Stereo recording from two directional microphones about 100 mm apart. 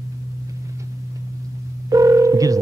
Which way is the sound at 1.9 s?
35° right (ahead or behind).